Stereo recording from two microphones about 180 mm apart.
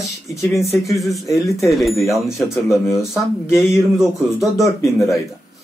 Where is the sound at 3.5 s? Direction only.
15° left (ahead or behind).